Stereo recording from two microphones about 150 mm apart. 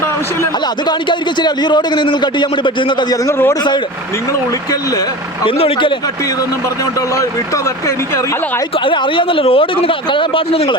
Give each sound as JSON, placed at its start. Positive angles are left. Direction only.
{"t": 0.9, "sound": "a man's voice", "side_deg": 30}
{"t": 3.2, "sound": "a man's voice", "side_deg": 15}
{"t": 5.5, "sound": "a man's voice", "side_deg": 35}
{"t": 7.2, "sound": "speech", "side_deg": 20}
{"t": 8.8, "sound": "a man's voice", "side_deg": 35}